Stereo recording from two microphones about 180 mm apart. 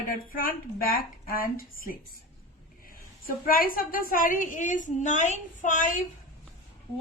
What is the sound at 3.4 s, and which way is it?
A woman's voice, 50° left (ahead or behind).